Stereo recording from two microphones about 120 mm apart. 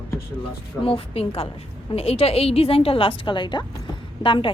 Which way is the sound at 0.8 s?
50° left (ahead or behind).